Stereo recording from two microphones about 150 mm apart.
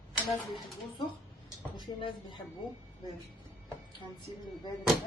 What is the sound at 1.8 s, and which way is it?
Speech, 35° left (ahead or behind).